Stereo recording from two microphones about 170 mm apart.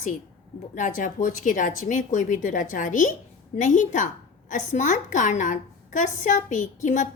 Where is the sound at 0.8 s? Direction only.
50° left (ahead or behind).